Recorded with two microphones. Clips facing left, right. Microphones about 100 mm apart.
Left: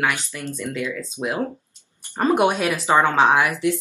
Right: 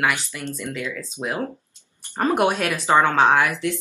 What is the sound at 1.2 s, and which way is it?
Speech, 25° left (ahead or behind).